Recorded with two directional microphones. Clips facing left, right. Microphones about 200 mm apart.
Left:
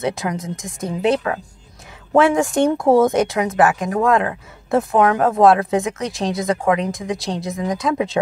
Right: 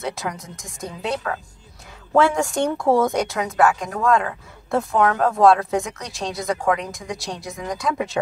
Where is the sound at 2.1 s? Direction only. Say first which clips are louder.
Left 4 dB; 15° left (ahead or behind).